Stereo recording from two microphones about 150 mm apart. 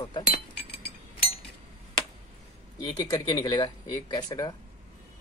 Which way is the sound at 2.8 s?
25° left (ahead or behind).